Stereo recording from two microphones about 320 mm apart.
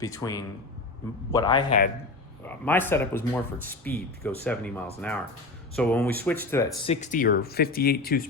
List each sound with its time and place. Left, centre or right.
0.0 s speech: centre; by 8.2 s left